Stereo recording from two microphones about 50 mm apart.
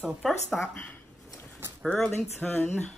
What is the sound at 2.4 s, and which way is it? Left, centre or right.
Speech, left.